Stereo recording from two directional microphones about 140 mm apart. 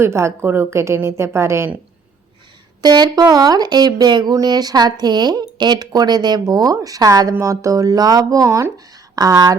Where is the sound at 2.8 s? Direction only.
30° right (ahead or behind).